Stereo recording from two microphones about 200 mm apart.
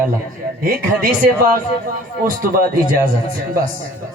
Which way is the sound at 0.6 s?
50° right (ahead or behind).